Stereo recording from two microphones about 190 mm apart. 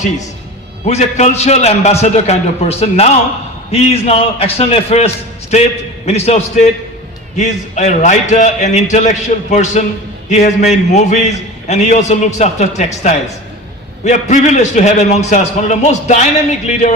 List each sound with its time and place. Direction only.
0.9 s a man's voice: 35° left (ahead or behind)